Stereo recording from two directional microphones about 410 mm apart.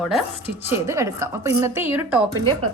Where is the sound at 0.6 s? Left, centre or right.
Centre.